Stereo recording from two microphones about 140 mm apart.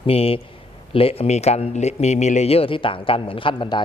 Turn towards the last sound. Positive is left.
turn(degrees=35)  # may be behind; listen again after turning